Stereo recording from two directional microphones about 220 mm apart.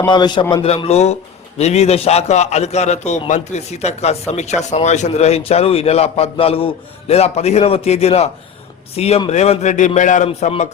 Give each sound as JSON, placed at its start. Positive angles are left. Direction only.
{"t": 0.0, "sound": "a man's voice", "side_deg": 20}